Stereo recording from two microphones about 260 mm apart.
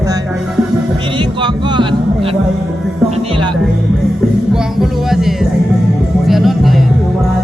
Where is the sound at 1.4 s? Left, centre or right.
Centre.